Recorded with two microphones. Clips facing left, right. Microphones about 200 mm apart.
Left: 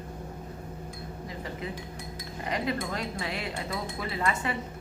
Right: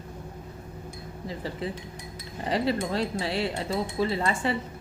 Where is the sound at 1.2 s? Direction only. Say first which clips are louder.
Right 5 dB; 30° right (ahead or behind).